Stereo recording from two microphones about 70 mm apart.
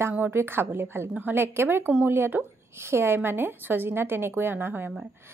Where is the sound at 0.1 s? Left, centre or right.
Right.